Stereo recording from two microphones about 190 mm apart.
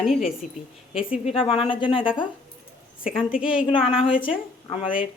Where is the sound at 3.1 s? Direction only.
5° right (ahead or behind).